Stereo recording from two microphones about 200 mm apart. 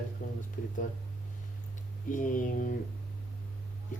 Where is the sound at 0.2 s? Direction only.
40° left (ahead or behind).